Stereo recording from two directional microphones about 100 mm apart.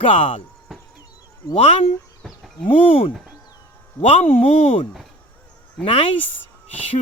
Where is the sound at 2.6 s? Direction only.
65° left (ahead or behind).